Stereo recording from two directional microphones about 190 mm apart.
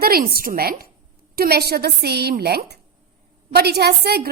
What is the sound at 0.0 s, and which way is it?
A woman's voice, 50° right (ahead or behind).